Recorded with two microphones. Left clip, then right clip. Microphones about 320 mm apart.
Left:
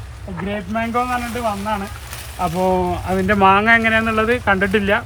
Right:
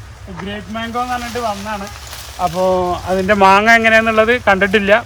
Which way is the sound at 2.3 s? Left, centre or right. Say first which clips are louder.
Right 3 dB; centre.